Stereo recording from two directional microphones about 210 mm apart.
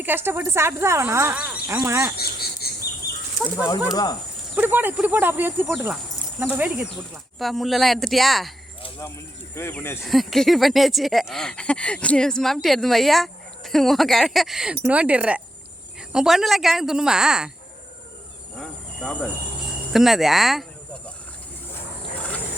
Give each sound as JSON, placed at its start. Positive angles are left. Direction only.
{"t": 0.0, "sound": "speech", "side_deg": -10}
{"t": 2.1, "sound": "a sound", "side_deg": 50}
{"t": 3.7, "sound": "speech", "side_deg": 20}
{"t": 4.5, "sound": "speech", "side_deg": -10}
{"t": 8.8, "sound": "a sound", "side_deg": 15}
{"t": 9.6, "sound": "speech", "side_deg": 10}
{"t": 10.0, "sound": "speech", "side_deg": 0}
{"t": 18.5, "sound": "insect", "side_deg": 0}
{"t": 19.9, "sound": "speech", "side_deg": 0}